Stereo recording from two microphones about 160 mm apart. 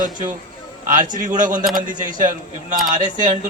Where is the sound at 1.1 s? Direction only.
55° right (ahead or behind).